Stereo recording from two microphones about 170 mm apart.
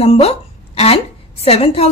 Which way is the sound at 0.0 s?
35° left (ahead or behind).